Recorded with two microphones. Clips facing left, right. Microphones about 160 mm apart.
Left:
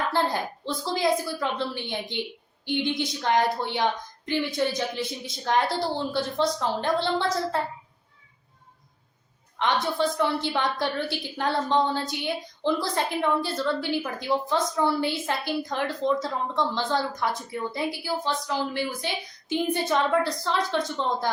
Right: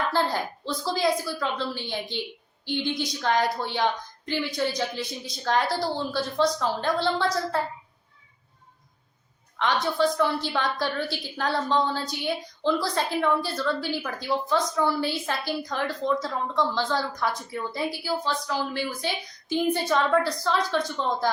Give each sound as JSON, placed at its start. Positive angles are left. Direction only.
{"t": 0.1, "sound": "a woman's voice", "side_deg": 20}
{"t": 9.6, "sound": "a woman's voice", "side_deg": 20}